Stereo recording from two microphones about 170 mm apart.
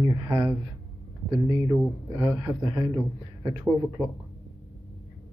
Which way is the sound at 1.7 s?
20° right (ahead or behind).